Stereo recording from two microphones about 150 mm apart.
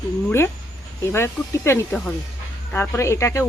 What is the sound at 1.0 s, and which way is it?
Speech, 15° left (ahead or behind).